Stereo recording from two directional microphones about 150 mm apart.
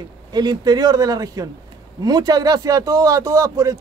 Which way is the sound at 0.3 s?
25° right (ahead or behind).